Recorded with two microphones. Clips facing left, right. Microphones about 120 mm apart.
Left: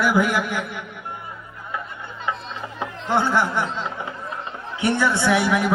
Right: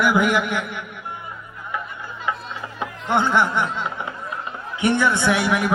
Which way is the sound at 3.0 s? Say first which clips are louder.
Right 1 dB; 20° right (ahead or behind).